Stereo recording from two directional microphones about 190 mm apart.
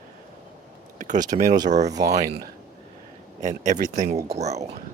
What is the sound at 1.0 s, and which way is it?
Speech, 40° right (ahead or behind).